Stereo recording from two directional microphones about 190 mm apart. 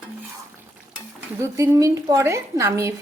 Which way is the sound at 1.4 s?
15° right (ahead or behind).